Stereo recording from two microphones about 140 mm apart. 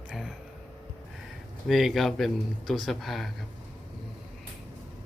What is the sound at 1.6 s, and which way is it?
A man's voice, centre (ahead or behind).